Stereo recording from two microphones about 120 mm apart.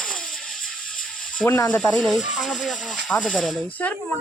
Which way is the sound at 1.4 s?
25° left (ahead or behind).